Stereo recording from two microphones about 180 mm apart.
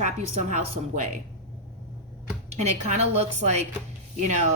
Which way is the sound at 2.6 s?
35° right (ahead or behind).